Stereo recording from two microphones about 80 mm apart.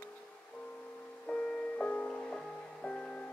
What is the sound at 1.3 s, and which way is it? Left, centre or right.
Music, centre.